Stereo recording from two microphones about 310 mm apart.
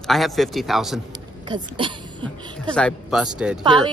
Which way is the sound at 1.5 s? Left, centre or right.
Centre.